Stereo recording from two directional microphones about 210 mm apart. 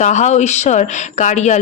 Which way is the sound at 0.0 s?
35° left (ahead or behind).